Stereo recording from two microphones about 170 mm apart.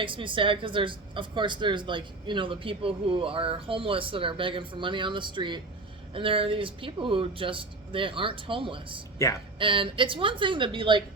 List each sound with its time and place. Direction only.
0.0 s speech: 30° right (ahead or behind)
9.1 s speech: 20° left (ahead or behind)
9.6 s speech: 30° right (ahead or behind)